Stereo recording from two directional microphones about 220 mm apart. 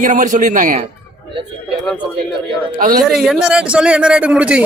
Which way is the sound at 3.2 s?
5° right (ahead or behind).